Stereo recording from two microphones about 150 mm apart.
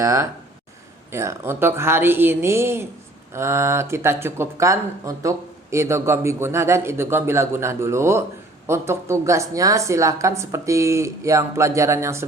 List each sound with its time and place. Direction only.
0.0 s a woman's voice: 20° right (ahead or behind)